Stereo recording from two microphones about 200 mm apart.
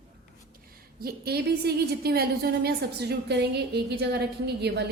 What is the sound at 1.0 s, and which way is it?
A woman's voice, 50° right (ahead or behind).